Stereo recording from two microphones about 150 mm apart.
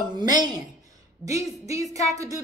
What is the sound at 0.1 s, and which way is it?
A man's voice, 25° right (ahead or behind).